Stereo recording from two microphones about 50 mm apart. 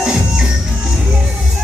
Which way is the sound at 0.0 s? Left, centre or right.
Centre.